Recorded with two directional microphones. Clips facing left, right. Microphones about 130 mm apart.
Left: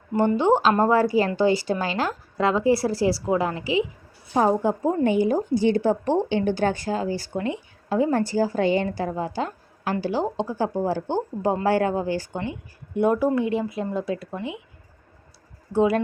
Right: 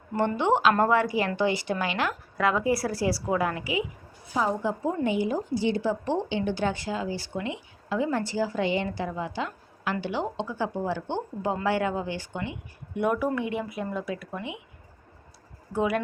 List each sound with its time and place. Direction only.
0.3 s a woman's voice: 30° left (ahead or behind)
4.4 s a woman's voice: 50° left (ahead or behind); by 14.3 s 30° left (ahead or behind)
15.7 s speech: 30° left (ahead or behind)